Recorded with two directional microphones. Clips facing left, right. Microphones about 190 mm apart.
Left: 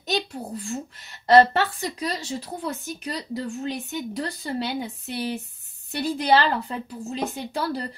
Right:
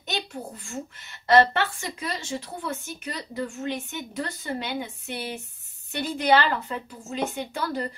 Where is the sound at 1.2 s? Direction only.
35° left (ahead or behind).